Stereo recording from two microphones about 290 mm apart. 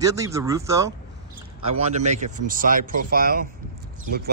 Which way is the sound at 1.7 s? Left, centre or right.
Right.